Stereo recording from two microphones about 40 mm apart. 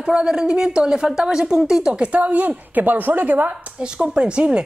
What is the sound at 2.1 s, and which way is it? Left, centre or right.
A woman's voice, right.